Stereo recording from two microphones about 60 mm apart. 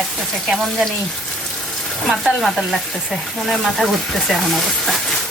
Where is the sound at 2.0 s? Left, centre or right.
Centre.